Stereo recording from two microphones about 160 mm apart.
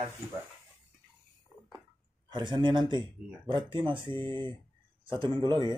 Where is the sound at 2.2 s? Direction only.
30° right (ahead or behind).